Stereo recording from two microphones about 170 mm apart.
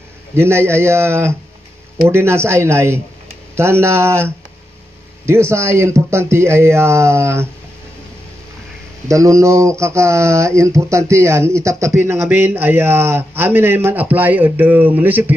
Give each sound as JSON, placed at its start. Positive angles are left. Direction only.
{"t": 0.4, "sound": "speech", "side_deg": -15}
{"t": 9.0, "sound": "speech", "side_deg": -20}